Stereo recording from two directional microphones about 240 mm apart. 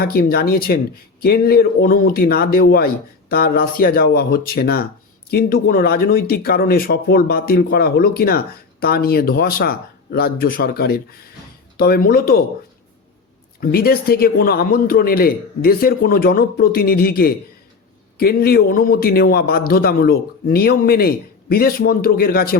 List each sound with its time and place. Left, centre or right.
0.0 s speech: left
13.6 s speech: left